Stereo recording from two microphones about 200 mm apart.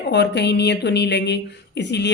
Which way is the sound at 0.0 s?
60° left (ahead or behind).